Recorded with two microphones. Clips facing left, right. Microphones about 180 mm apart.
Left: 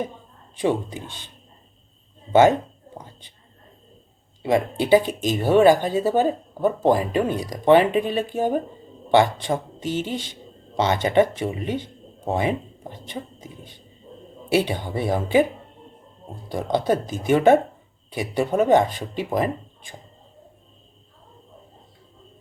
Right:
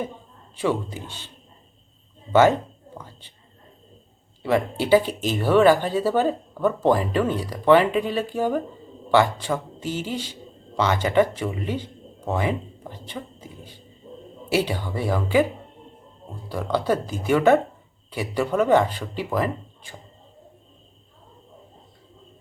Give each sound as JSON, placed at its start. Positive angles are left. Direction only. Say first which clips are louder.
{"t": 0.6, "sound": "speech", "louder": "left 2 dB", "side_deg": 15}
{"t": 2.3, "sound": "speech", "louder": "left 1 dB", "side_deg": 25}
{"t": 3.0, "sound": "whispering", "louder": "even", "side_deg": 20}
{"t": 4.4, "sound": "speech", "louder": "left 1 dB", "side_deg": 15}
{"t": 14.5, "sound": "speech", "louder": "left 2 dB", "side_deg": 20}
{"t": 16.6, "sound": "speech", "louder": "left 1 dB", "side_deg": 20}